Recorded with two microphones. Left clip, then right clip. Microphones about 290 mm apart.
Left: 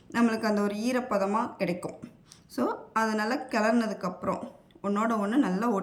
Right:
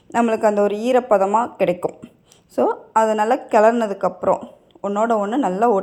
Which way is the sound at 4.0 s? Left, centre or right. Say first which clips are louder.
Right 13 dB; right.